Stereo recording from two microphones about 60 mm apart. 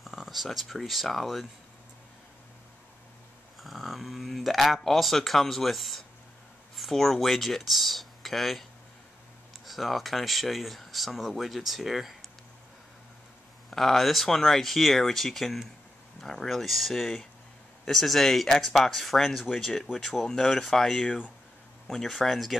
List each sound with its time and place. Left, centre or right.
0.0 s speech: centre
3.6 s speech: centre
9.7 s speech: centre
13.7 s speech: centre
21.0 s speech: centre
21.8 s speech: centre